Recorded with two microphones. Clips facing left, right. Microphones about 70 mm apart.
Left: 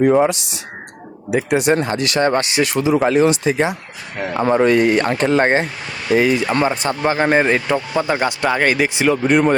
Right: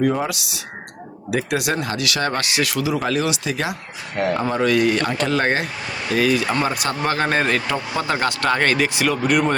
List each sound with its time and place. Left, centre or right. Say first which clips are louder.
0.0 s speech: left 7 dB; left